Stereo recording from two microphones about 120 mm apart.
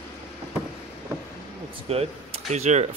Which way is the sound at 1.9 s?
60° right (ahead or behind).